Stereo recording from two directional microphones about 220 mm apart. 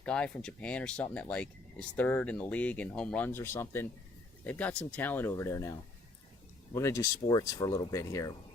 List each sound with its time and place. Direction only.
0.0 s speech: 5° left (ahead or behind)
6.7 s speech: 15° left (ahead or behind)